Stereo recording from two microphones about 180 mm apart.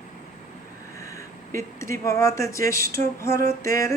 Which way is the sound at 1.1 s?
15° left (ahead or behind).